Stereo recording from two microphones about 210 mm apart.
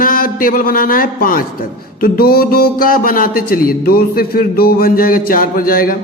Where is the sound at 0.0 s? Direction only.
40° left (ahead or behind).